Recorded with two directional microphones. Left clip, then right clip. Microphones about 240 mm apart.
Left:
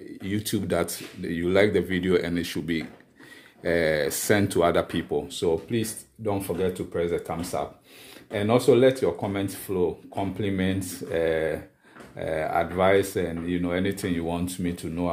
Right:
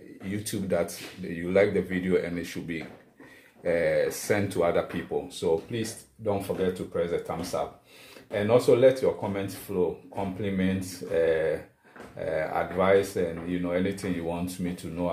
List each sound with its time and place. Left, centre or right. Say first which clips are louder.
0.3 s speech: left 2 dB; left